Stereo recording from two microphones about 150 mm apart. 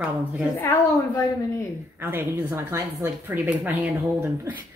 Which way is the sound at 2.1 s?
15° right (ahead or behind).